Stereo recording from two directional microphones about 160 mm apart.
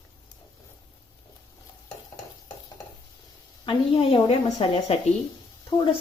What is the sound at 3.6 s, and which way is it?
Speech, 35° left (ahead or behind).